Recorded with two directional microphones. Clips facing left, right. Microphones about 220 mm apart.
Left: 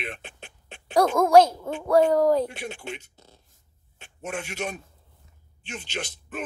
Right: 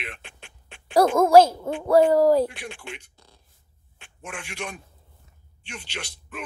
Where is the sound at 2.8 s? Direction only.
20° left (ahead or behind).